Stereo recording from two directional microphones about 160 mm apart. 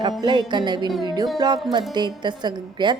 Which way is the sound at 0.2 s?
30° right (ahead or behind).